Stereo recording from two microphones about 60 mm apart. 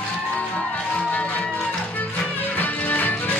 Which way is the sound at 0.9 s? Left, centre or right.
Centre.